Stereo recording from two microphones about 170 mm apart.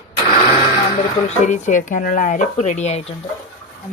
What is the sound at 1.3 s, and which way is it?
Speech, 45° left (ahead or behind).